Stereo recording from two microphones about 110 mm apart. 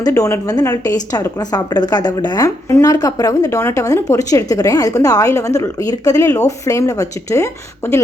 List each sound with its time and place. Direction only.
0.1 s a woman's voice: 30° left (ahead or behind)